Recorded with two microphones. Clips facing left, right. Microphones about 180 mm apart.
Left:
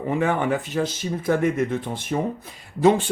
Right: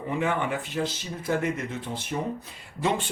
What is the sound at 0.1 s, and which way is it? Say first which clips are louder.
Speech: left 4 dB; 45° left (ahead or behind).